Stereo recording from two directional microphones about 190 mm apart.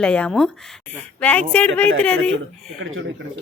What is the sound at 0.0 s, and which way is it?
A woman's voice, 5° left (ahead or behind).